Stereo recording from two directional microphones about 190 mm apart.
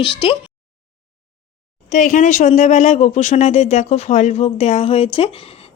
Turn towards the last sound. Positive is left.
turn(degrees=30)  # may be behind; listen again after turning